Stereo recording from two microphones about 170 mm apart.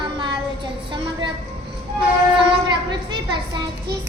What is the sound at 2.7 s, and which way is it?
Speech, 25° right (ahead or behind).